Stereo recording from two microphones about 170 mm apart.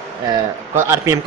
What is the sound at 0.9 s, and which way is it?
Speech, 15° right (ahead or behind).